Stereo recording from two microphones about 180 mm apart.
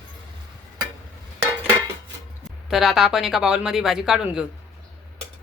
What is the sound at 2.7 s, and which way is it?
A woman's voice, centre (ahead or behind).